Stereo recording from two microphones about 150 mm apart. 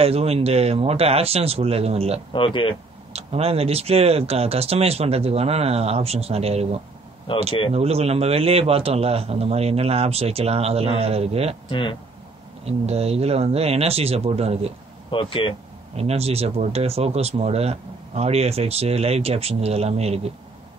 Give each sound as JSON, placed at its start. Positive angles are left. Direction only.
{"t": 0.0, "sound": "speech", "side_deg": -45}
{"t": 2.3, "sound": "speech", "side_deg": 35}
{"t": 3.1, "sound": "speech", "side_deg": -45}
{"t": 11.7, "sound": "speech", "side_deg": 35}
{"t": 12.6, "sound": "speech", "side_deg": -45}
{"t": 15.0, "sound": "speech", "side_deg": 35}
{"t": 16.0, "sound": "speech", "side_deg": -45}